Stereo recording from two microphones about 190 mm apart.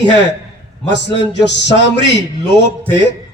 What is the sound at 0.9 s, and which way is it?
A man's voice, 65° left (ahead or behind).